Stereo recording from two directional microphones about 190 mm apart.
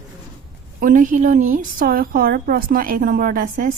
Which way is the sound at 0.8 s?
45° right (ahead or behind).